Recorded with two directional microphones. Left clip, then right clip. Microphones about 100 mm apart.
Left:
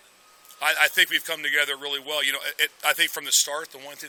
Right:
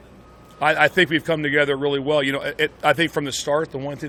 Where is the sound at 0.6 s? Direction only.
15° right (ahead or behind).